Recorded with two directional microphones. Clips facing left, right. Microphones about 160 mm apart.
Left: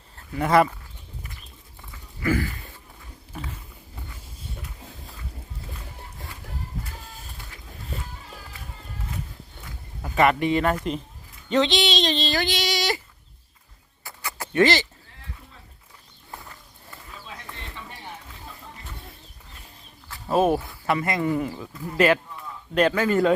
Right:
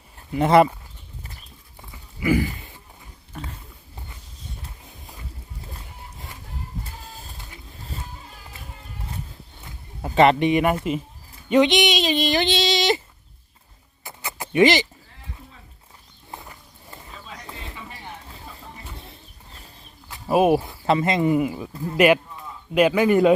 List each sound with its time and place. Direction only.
0.2 s speech: 20° right (ahead or behind)
1.9 s a sound: 15° right (ahead or behind)
3.3 s speech: 5° left (ahead or behind)
10.0 s speech: 25° right (ahead or behind)
14.0 s a sound: 20° right (ahead or behind)
16.3 s clip-clop: 20° right (ahead or behind)
17.5 s a sound: 5° right (ahead or behind)
20.1 s cricket: 15° right (ahead or behind)
20.6 s speech: 25° right (ahead or behind)